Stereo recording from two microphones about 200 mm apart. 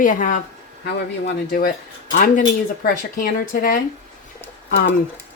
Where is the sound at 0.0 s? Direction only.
40° left (ahead or behind).